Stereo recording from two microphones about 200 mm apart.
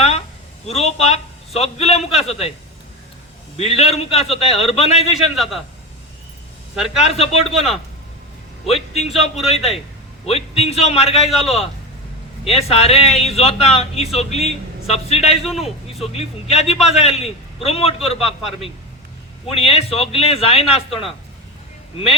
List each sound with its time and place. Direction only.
0.7 s a man's voice: 30° left (ahead or behind)
3.6 s speech: 30° left (ahead or behind)
5.1 s a man's voice: centre (ahead or behind)
6.7 s a man's voice: centre (ahead or behind)
7.0 s speech: 30° left (ahead or behind)
8.6 s speech: 30° left (ahead or behind)
9.4 s a man's voice: centre (ahead or behind)
10.2 s speech: 30° left (ahead or behind)
11.2 s a man's voice: centre (ahead or behind)
12.5 s speech: 30° left (ahead or behind)
15.4 s a man's voice: centre (ahead or behind)
16.0 s speech: 30° left (ahead or behind)
18.2 s a man's voice: centre (ahead or behind)
19.5 s speech: 30° left (ahead or behind)